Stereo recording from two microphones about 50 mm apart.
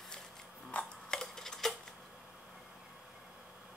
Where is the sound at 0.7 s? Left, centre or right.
Left.